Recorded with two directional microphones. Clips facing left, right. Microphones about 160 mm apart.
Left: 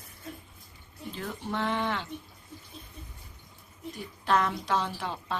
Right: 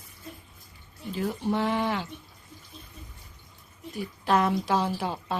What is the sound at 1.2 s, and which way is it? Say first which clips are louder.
Speech: right 6 dB; 10° right (ahead or behind).